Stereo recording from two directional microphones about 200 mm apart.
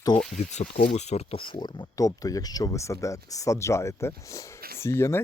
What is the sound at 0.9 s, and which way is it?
Speech, 35° left (ahead or behind).